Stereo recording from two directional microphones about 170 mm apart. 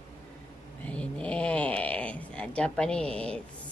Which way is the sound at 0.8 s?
5° left (ahead or behind).